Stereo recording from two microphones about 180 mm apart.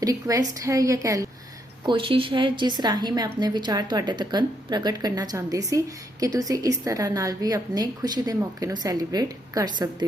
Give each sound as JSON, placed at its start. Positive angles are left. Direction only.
{"t": 0.0, "sound": "a woman's voice", "side_deg": -20}